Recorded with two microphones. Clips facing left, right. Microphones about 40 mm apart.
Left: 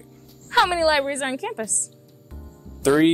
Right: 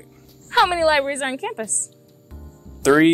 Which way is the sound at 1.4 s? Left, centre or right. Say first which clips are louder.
Right 1 dB; centre.